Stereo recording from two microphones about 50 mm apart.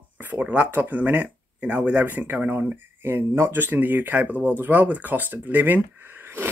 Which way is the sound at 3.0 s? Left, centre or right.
Right.